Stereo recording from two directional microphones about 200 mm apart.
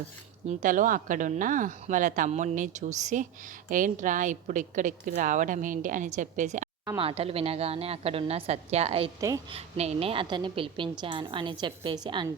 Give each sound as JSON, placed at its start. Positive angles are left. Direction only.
{"t": 0.4, "sound": "a woman's voice", "side_deg": -40}
{"t": 6.8, "sound": "a woman's voice", "side_deg": -25}